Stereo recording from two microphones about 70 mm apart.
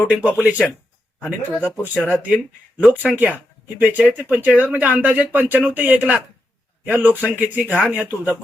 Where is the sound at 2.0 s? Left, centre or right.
Centre.